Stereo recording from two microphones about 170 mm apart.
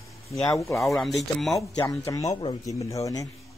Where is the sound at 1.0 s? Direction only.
Centre (ahead or behind).